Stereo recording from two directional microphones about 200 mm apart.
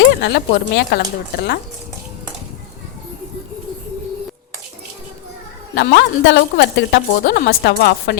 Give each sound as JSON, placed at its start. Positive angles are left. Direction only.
{"t": 0.1, "sound": "speech", "side_deg": 55}
{"t": 5.7, "sound": "a woman's voice", "side_deg": 60}